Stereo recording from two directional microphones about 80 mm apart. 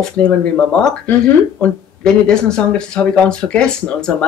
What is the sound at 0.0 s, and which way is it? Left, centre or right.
Speech, centre.